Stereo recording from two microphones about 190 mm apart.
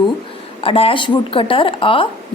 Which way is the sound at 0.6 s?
30° left (ahead or behind).